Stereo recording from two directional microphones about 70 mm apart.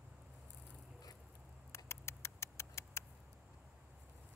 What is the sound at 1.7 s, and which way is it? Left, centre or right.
Rodents, left.